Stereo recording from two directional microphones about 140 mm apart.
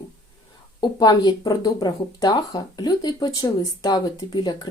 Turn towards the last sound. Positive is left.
turn(degrees=30)  # may be behind; listen again after turning